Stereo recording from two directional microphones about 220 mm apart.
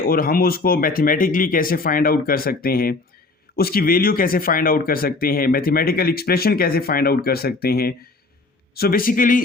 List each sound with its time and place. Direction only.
0.0 s speech: 40° left (ahead or behind)